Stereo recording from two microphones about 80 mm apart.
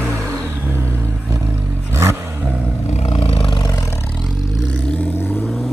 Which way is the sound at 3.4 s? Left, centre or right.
Left.